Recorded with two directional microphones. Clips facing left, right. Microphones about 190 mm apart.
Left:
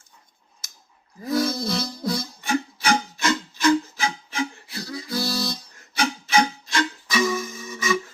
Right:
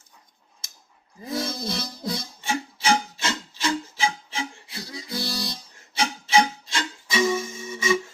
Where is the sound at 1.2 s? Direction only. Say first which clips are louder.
Left 6 dB; 25° right (ahead or behind).